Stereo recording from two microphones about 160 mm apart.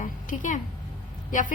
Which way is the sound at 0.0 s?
50° left (ahead or behind).